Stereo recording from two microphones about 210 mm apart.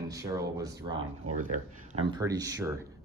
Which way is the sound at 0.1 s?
15° right (ahead or behind).